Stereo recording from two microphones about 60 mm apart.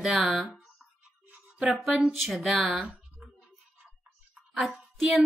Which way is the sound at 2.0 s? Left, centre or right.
Centre.